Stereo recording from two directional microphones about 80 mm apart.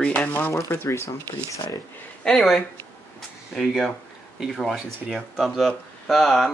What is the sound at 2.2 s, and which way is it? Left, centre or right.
Speech, centre.